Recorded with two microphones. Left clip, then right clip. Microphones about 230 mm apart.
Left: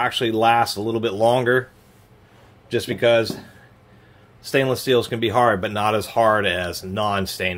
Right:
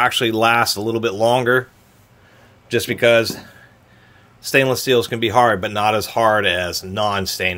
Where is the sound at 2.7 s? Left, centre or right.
Right.